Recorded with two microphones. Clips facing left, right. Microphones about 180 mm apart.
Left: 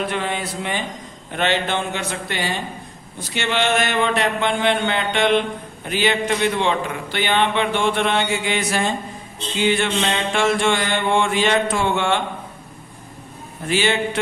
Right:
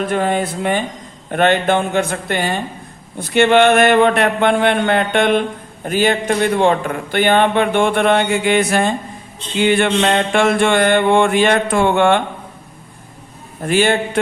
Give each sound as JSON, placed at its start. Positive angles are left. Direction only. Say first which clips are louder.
{"t": 0.0, "sound": "speech", "louder": "right 7 dB", "side_deg": -45}
{"t": 9.6, "sound": "mantra", "louder": "right 5 dB", "side_deg": -55}
{"t": 13.7, "sound": "speech", "louder": "right 5 dB", "side_deg": -50}